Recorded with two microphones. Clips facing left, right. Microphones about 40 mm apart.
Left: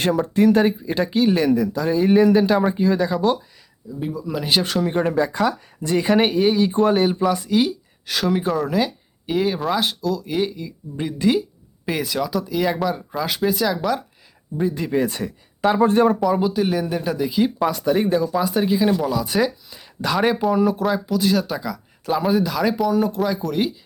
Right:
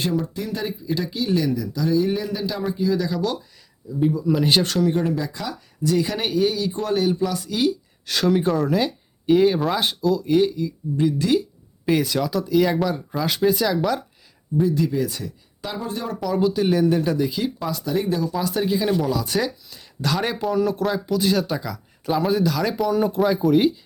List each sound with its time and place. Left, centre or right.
0.3 s speech: left
2.2 s speech: left
2.6 s speech: left
3.1 s speech: left
4.0 s speech: centre
4.8 s speech: left; by 10.5 s centre
10.5 s speech: centre
11.9 s speech: centre
14.6 s speech: left
14.8 s speech: left
16.2 s speech: centre
17.7 s speech: left
18.1 s speech: centre